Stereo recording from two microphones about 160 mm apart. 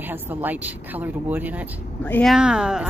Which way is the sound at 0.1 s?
10° right (ahead or behind).